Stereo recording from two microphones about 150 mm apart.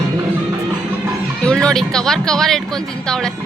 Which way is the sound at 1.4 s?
5° left (ahead or behind).